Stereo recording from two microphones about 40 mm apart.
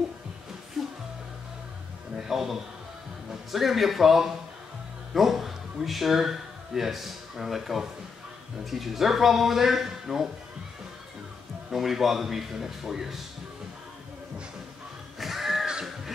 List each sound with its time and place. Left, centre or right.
0.8 s music: centre
2.1 s music: centre
3.5 s a man's voice: centre
11.7 s a man's voice: centre
15.1 s a sound: centre
15.6 s crow: centre